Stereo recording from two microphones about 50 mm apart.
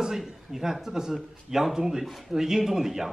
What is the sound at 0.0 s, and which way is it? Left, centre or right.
A man's voice, centre.